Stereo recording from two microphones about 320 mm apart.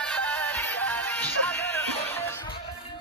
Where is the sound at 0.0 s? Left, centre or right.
Centre.